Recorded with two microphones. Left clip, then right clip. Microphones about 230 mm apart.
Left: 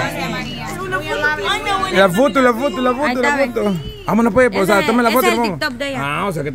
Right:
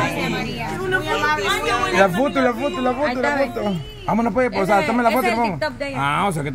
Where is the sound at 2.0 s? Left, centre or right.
Left.